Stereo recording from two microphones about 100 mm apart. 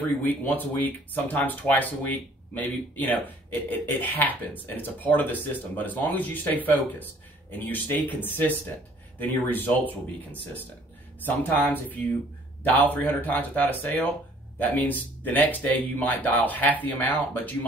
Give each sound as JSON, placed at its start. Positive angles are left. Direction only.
{"t": 0.2, "sound": "speech", "side_deg": 15}